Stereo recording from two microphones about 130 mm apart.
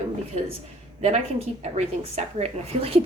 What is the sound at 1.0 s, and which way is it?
A woman's voice, 60° right (ahead or behind).